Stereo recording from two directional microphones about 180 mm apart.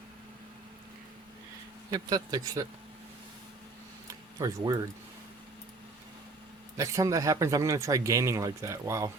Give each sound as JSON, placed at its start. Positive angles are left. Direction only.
{"t": 1.9, "sound": "speech", "side_deg": -20}
{"t": 4.4, "sound": "speech", "side_deg": -20}
{"t": 6.7, "sound": "speech", "side_deg": -15}